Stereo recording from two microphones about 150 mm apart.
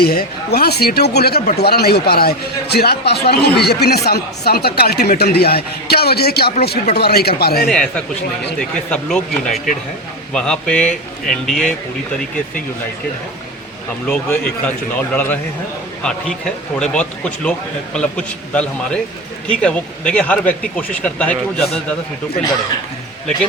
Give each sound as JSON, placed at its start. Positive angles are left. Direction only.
{"t": 0.0, "sound": "speech", "side_deg": 90}
{"t": 7.7, "sound": "a man's voice", "side_deg": 5}
{"t": 14.1, "sound": "speech", "side_deg": 10}
{"t": 16.7, "sound": "speech", "side_deg": 5}